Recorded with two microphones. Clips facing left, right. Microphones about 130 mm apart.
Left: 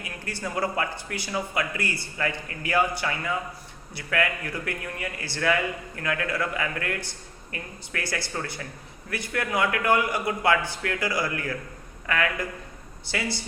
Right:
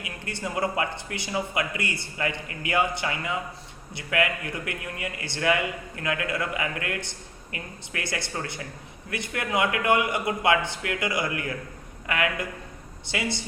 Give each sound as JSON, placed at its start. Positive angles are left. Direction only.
{"t": 0.0, "sound": "a man's voice", "side_deg": -20}